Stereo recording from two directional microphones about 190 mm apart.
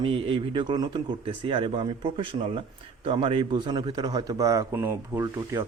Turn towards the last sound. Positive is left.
turn(degrees=-15)  # may be behind; listen again after turning